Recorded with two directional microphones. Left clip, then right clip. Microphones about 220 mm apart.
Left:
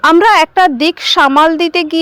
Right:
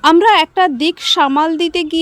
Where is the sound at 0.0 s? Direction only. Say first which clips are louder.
Left 2 dB; 15° left (ahead or behind).